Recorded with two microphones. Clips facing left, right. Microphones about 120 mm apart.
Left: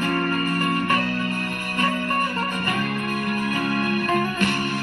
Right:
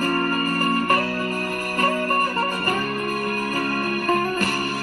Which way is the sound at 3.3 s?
40° right (ahead or behind).